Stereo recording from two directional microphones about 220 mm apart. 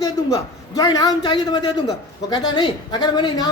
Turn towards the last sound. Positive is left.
turn(degrees=20)  # may be behind; listen again after turning